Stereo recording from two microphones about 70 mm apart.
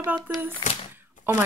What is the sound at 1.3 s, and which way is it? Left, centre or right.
Speech, right.